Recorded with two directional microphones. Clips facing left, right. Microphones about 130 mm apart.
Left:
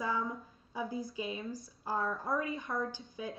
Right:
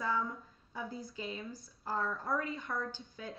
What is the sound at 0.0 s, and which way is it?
A woman's voice, 25° left (ahead or behind).